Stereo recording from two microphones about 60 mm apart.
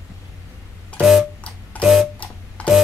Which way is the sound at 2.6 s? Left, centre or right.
Left.